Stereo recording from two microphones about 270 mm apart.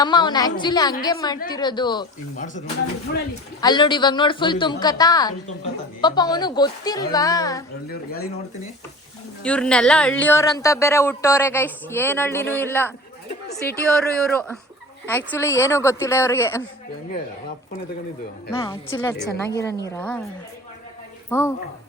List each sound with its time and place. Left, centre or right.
0.0 s a man's voice: centre
2.3 s speech: left
3.6 s a man's voice: centre
9.4 s a man's voice: centre
18.5 s a man's voice: centre
21.2 s speech: centre